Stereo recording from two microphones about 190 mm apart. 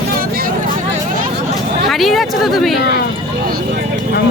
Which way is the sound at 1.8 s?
Centre (ahead or behind).